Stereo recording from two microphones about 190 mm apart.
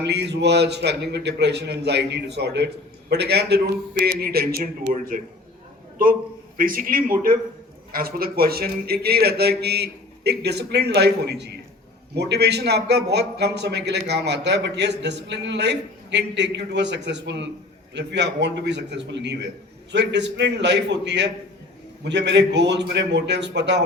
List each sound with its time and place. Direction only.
0.0 s a man's voice: 65° right (ahead or behind); by 5.2 s 45° right (ahead or behind)
6.6 s a man's voice: 50° right (ahead or behind); by 23.8 s 65° right (ahead or behind)